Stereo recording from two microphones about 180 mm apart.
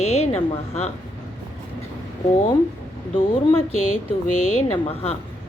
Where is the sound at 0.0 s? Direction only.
35° left (ahead or behind).